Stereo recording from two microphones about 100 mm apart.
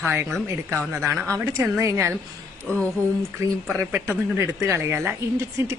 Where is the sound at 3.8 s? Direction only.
25° right (ahead or behind).